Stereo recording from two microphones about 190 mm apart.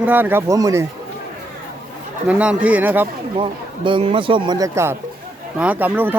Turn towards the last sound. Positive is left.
turn(degrees=-10)  # may be behind; listen again after turning